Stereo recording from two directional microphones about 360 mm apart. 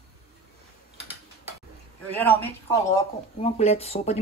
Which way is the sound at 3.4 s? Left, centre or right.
Centre.